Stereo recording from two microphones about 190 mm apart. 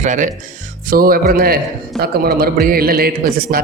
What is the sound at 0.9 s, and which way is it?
Speech, 50° right (ahead or behind).